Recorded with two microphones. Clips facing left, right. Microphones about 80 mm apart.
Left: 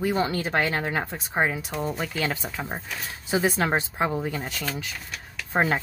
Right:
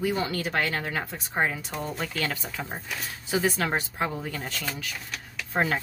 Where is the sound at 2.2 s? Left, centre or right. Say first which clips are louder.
Left 3 dB; left.